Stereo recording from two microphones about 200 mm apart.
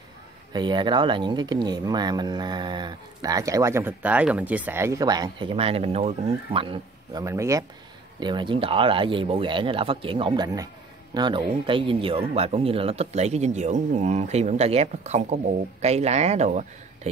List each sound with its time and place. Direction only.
0.5 s speech: 20° right (ahead or behind)
7.2 s speech: 15° right (ahead or behind); by 17.1 s 35° right (ahead or behind)